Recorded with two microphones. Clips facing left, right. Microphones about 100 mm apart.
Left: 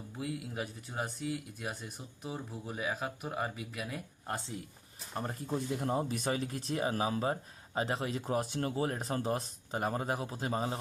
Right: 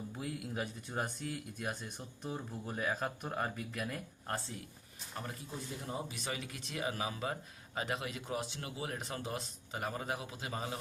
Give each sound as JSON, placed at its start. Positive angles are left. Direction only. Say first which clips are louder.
{"t": 0.1, "sound": "speech", "louder": "left 6 dB", "side_deg": 0}
{"t": 5.1, "sound": "speech", "louder": "left 6 dB", "side_deg": 35}
{"t": 5.5, "sound": "speech", "louder": "left 9 dB", "side_deg": 60}